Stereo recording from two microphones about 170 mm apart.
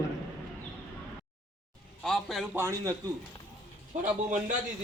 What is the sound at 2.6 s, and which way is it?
Speech, 15° right (ahead or behind).